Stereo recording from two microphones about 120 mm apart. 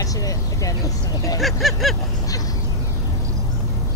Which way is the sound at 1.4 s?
Centre (ahead or behind).